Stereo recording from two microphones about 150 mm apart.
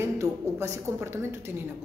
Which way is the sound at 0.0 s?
20° right (ahead or behind).